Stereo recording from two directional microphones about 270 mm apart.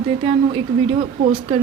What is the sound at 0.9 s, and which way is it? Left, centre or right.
Speech, right.